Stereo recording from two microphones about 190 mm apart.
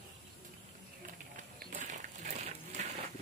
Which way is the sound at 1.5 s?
45° right (ahead or behind).